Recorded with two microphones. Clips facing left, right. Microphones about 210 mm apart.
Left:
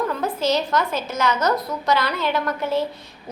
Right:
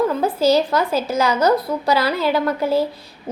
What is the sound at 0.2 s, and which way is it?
A woman's voice, 30° right (ahead or behind).